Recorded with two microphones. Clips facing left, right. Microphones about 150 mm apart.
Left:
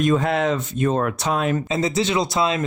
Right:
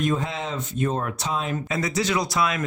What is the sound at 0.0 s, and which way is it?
Speech, 80° left.